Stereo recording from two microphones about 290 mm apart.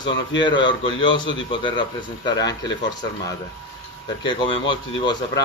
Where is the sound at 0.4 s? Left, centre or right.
Centre.